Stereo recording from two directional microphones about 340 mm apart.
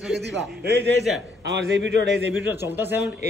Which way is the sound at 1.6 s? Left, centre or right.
Right.